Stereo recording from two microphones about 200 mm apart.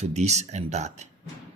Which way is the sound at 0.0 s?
35° right (ahead or behind).